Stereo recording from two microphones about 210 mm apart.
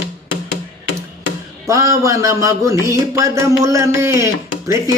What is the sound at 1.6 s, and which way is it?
Music, 15° right (ahead or behind).